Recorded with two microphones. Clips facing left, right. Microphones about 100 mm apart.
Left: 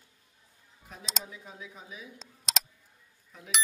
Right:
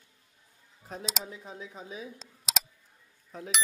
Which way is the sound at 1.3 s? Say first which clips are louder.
Right 3 dB; 35° right (ahead or behind).